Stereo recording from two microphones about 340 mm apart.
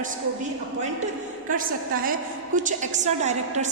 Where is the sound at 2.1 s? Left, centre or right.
Right.